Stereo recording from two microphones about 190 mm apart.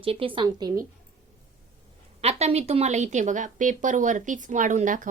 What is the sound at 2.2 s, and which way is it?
A woman's voice, 35° right (ahead or behind).